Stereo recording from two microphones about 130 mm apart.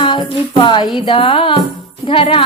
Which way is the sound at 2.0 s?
45° left (ahead or behind).